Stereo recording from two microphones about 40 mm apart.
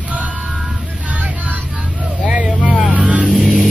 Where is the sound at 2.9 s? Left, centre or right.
Right.